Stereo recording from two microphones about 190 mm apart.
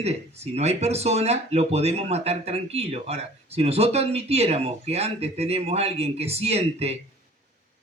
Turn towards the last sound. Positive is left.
turn(degrees=-35)  # may be behind; listen again after turning